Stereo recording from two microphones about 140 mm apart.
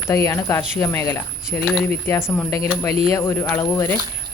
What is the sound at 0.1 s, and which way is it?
Speech, 20° left (ahead or behind).